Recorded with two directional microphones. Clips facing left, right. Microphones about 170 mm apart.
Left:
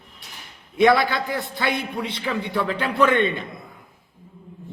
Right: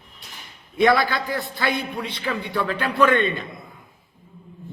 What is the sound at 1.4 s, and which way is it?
Speech, 25° left (ahead or behind).